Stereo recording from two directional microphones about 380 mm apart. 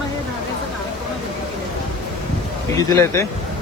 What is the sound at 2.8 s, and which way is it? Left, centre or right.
Speech, centre.